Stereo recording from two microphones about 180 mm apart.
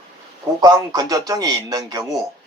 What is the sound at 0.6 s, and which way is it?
Speech, 20° right (ahead or behind).